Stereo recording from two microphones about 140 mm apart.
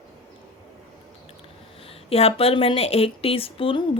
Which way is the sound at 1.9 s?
45° left (ahead or behind).